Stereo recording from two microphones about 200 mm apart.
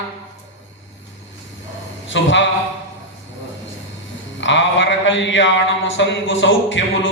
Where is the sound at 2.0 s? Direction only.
65° left (ahead or behind).